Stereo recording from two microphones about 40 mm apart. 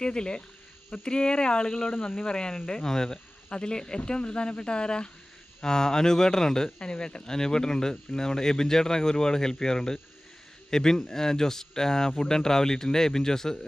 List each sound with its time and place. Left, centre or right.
0.0 s speech: left
1.9 s speech: left
2.2 s speech: left